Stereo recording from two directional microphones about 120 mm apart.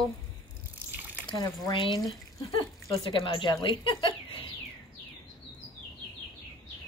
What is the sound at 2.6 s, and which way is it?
Speech, 45° left (ahead or behind).